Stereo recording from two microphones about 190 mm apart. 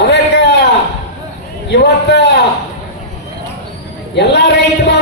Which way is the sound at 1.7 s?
60° left (ahead or behind).